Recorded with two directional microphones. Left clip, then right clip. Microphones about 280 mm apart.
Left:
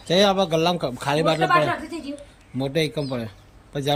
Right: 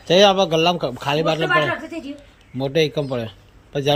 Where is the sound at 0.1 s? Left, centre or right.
Centre.